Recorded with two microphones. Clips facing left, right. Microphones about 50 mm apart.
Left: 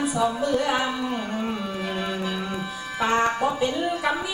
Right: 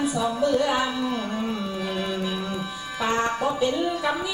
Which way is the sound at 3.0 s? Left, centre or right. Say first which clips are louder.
Left 2 dB; left.